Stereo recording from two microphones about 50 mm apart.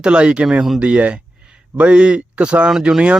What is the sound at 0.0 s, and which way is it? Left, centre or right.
Speech, right.